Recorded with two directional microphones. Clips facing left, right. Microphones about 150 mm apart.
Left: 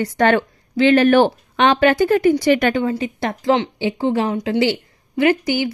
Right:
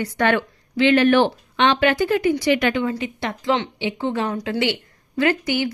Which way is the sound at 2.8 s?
35° left (ahead or behind).